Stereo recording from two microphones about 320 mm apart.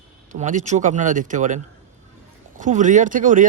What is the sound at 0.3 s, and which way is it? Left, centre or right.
Speech, right.